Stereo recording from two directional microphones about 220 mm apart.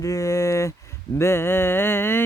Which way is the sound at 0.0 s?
15° left (ahead or behind).